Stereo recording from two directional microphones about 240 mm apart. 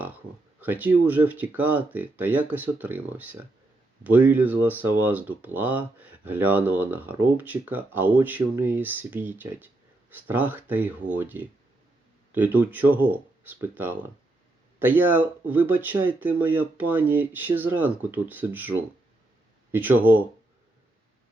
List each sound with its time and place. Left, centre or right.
0.6 s speech: centre
19.7 s speech: centre